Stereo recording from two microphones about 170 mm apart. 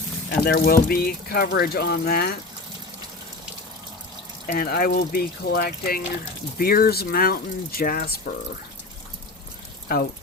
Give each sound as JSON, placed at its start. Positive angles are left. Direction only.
{"t": 0.3, "sound": "speech", "side_deg": 65}
{"t": 4.4, "sound": "speech", "side_deg": 60}
{"t": 9.9, "sound": "speech", "side_deg": 60}